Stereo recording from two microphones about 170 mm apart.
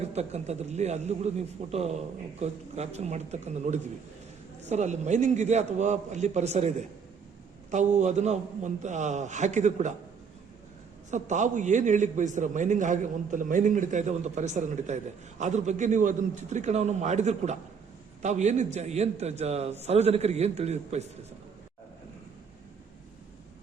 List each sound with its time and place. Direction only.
0.0 s a man's voice: 40° right (ahead or behind)
11.1 s a man's voice: 45° right (ahead or behind)